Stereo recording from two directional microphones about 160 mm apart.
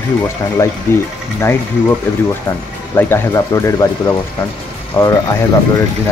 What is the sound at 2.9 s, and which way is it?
Speech, 15° left (ahead or behind).